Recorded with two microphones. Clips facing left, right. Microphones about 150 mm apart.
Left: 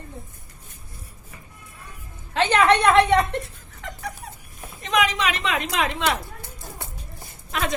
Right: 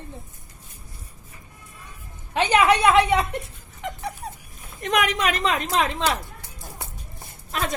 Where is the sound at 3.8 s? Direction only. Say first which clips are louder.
Right 5 dB; 20° right (ahead or behind).